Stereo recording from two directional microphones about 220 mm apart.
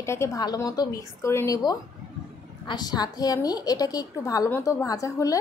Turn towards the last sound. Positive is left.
turn(degrees=15)  # may be behind; listen again after turning